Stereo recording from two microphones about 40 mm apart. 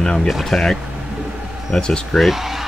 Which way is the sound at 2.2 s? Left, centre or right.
Centre.